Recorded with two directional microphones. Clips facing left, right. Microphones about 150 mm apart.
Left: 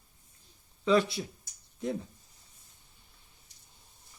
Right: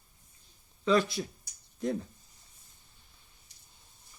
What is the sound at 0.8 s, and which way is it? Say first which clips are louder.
Speech: left 1 dB; 25° left (ahead or behind).